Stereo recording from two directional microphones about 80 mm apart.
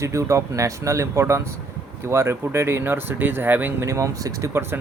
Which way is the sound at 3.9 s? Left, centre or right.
Right.